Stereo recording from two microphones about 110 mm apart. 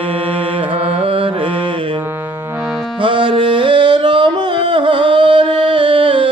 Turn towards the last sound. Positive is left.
turn(degrees=-55)  # may be behind; listen again after turning